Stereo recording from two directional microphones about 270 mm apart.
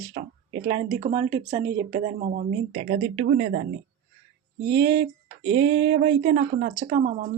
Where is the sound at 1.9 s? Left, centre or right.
Right.